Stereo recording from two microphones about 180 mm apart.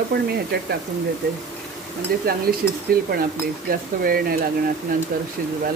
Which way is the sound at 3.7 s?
55° right (ahead or behind).